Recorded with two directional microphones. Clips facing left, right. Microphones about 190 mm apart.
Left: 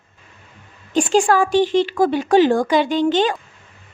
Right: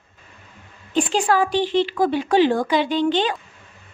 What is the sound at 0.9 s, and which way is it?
A woman's voice, 45° left (ahead or behind).